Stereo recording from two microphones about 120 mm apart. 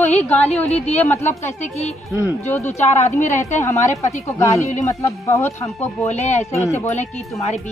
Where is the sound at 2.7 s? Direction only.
70° left (ahead or behind).